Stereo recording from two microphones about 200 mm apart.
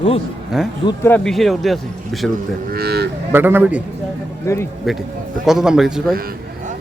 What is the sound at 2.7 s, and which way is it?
Speech, 50° right (ahead or behind).